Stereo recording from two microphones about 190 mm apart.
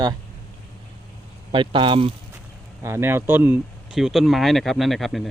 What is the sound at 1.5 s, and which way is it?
Speech, 25° right (ahead or behind).